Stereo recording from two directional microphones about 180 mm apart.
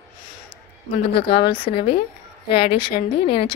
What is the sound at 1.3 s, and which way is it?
Speech, 65° left (ahead or behind).